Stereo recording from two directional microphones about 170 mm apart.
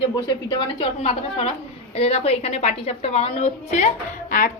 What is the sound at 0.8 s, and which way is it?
A woman's voice, 35° left (ahead or behind).